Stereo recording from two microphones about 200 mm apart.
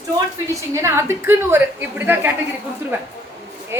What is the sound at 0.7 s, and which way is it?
A woman's voice, 15° right (ahead or behind).